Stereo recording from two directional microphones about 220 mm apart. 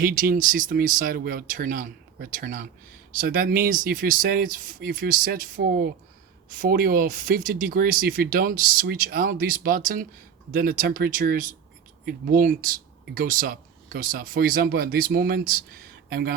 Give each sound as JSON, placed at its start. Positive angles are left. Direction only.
{"t": 0.0, "sound": "speech", "side_deg": -40}